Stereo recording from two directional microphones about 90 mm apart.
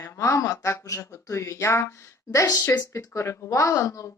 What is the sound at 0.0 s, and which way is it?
Speech, 30° left (ahead or behind).